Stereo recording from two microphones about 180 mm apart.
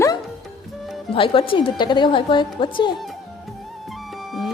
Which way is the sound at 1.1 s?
30° left (ahead or behind).